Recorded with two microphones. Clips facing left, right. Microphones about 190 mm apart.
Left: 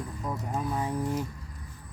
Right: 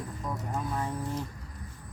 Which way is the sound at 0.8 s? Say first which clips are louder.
Left 3 dB; 10° left (ahead or behind).